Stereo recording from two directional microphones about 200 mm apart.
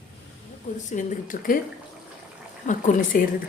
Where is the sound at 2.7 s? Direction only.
45° left (ahead or behind).